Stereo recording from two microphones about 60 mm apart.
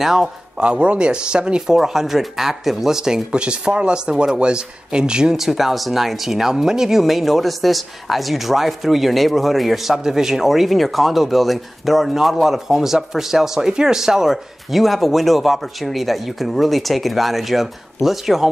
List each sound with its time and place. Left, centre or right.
0.0 s speech: centre
0.6 s speech: centre